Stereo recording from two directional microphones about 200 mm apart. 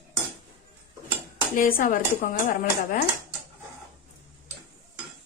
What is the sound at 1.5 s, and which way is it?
Speech, 45° left (ahead or behind).